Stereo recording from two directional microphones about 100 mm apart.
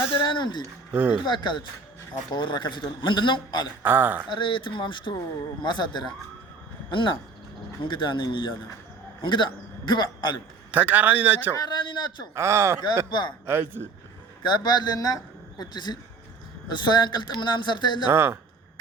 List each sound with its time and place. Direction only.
0.1 s a man's voice: 55° left (ahead or behind)
0.9 s a man's voice: 15° right (ahead or behind)
1.2 s a man's voice: 50° left (ahead or behind)
3.8 s a man's voice: 20° right (ahead or behind)
4.3 s a man's voice: 55° left (ahead or behind)
10.7 s a man's voice: 15° right (ahead or behind)
11.5 s a man's voice: 45° left (ahead or behind)
12.3 s speech: 30° right (ahead or behind)
13.1 s a man's voice: 50° left (ahead or behind)
13.4 s speech: 20° right (ahead or behind)
14.4 s a man's voice: 45° left (ahead or behind)
18.1 s speech: 20° right (ahead or behind)